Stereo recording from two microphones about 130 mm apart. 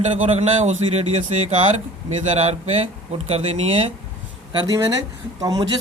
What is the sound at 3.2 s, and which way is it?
Speech, 55° right (ahead or behind).